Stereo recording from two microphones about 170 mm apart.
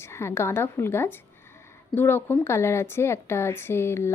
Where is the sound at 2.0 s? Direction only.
10° left (ahead or behind).